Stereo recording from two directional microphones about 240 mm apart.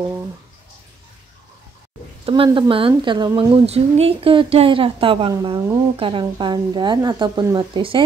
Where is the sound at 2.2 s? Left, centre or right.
Right.